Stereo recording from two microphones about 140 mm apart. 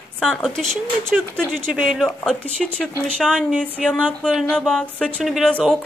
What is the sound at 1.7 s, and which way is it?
Speech, 5° right (ahead or behind).